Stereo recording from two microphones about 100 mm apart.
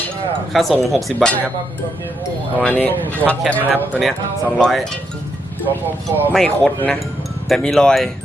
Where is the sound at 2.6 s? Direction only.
15° left (ahead or behind).